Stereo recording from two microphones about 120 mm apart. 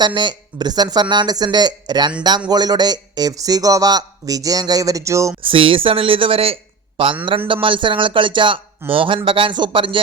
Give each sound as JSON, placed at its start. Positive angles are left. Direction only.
{"t": 0.0, "sound": "speech", "side_deg": -40}
{"t": 5.4, "sound": "speech", "side_deg": -45}